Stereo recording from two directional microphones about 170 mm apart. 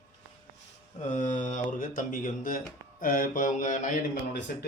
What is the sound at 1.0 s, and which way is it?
Speech, 45° left (ahead or behind).